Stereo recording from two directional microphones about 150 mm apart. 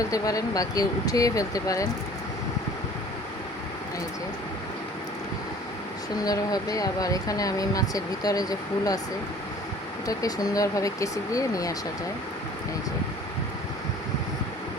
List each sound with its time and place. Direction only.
0.0 s speech: 25° left (ahead or behind)
6.2 s speech: 25° left (ahead or behind)
10.1 s speech: 25° left (ahead or behind)